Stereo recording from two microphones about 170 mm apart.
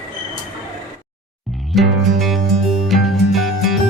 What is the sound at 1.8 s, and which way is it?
Music, centre (ahead or behind).